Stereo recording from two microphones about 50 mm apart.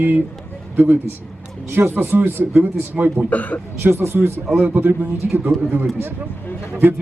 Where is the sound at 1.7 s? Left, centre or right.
Right.